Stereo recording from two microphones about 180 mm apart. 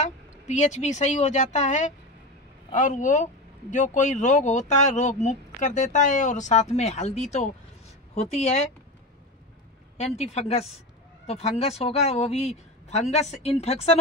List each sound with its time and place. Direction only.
0.0 s speech: 40° left (ahead or behind)
9.9 s speech: 35° left (ahead or behind)